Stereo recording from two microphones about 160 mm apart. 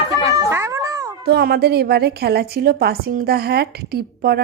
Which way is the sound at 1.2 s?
85° right.